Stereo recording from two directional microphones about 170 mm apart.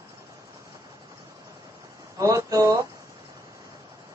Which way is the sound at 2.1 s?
20° right (ahead or behind).